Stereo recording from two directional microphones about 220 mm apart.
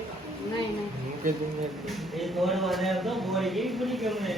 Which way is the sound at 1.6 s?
Centre (ahead or behind).